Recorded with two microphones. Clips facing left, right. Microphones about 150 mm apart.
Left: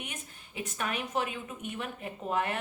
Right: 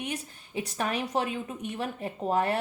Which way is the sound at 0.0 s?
35° right (ahead or behind).